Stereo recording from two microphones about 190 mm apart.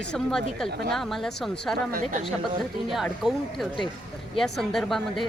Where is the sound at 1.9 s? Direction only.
45° right (ahead or behind).